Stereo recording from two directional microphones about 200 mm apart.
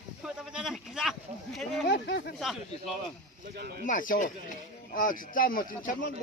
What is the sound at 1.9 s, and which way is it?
Speech, 55° left (ahead or behind).